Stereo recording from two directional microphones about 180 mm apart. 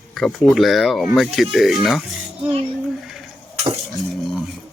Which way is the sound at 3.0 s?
Centre (ahead or behind).